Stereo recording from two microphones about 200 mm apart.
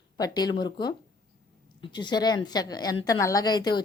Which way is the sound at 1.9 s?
20° left (ahead or behind).